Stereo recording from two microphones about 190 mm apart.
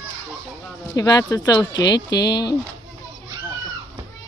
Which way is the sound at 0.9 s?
20° left (ahead or behind).